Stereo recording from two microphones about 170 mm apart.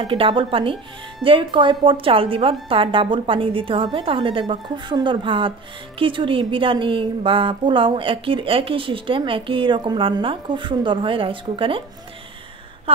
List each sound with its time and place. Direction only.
0.0 s a woman's voice: 30° right (ahead or behind)